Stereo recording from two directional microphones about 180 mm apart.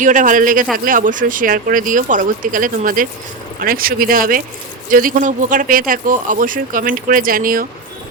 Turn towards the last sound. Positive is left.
turn(degrees=-50)  # may be behind; listen again after turning